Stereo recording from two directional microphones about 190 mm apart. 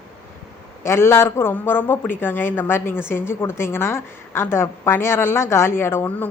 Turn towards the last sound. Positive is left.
turn(degrees=10)  # may be behind; listen again after turning